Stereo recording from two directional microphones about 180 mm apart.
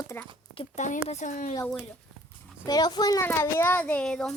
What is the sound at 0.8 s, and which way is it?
Speech, 40° left (ahead or behind).